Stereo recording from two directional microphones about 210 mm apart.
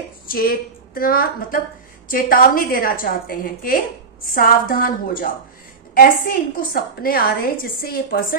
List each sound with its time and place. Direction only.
0.3 s a woman's voice: 45° left (ahead or behind)